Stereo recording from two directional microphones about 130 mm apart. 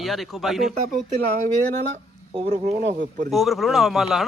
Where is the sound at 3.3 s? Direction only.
Centre (ahead or behind).